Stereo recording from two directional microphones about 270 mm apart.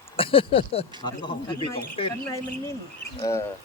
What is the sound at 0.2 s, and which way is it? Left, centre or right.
Speech, centre.